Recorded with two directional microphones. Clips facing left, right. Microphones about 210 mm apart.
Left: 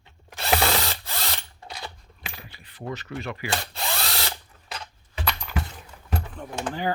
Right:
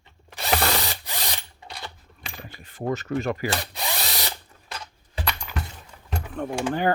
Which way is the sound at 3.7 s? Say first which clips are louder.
Even; 15° right (ahead or behind).